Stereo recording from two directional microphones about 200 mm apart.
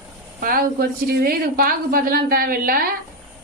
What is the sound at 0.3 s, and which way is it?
A woman's voice, 45° right (ahead or behind).